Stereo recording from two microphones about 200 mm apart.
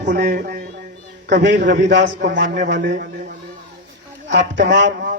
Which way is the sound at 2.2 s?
60° right (ahead or behind).